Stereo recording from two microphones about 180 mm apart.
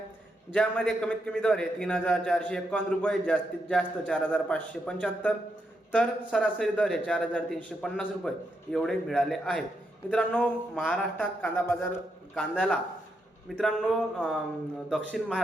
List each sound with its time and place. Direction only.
0.5 s a man's voice: 5° left (ahead or behind)